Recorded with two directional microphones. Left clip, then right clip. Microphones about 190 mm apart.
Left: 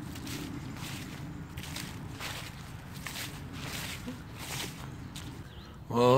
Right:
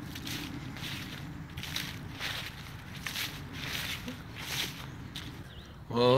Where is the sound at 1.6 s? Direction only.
10° left (ahead or behind).